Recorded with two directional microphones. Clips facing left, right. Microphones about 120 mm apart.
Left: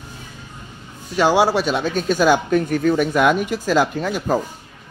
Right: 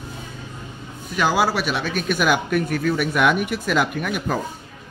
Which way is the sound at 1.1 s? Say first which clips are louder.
Left 4 dB; 25° left (ahead or behind).